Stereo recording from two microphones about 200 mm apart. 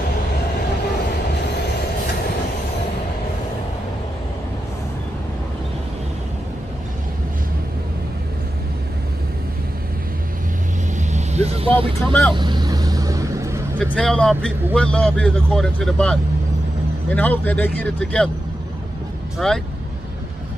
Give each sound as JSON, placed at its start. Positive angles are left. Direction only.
{"t": 11.0, "sound": "vehicle", "side_deg": -35}
{"t": 12.1, "sound": "speech", "side_deg": 5}
{"t": 12.4, "sound": "vehicle", "side_deg": -20}
{"t": 13.9, "sound": "a man's voice", "side_deg": 5}
{"t": 19.3, "sound": "a man's voice", "side_deg": 0}